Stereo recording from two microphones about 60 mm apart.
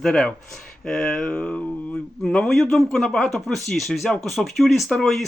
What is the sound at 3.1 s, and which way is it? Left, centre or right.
Speech, centre.